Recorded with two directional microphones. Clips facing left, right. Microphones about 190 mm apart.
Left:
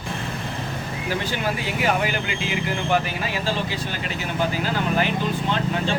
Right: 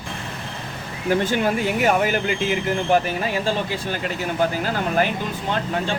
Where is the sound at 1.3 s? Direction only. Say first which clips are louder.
Right 5 dB; 50° right (ahead or behind).